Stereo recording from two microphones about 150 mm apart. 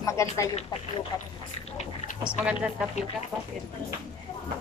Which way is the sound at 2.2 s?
5° right (ahead or behind).